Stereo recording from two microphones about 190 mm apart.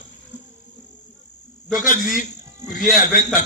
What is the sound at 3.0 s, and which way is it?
Speech, 45° left (ahead or behind).